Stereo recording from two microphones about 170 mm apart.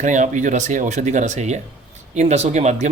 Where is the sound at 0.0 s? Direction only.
45° right (ahead or behind).